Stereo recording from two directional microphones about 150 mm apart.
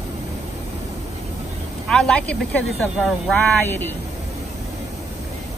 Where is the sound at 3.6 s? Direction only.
15° left (ahead or behind).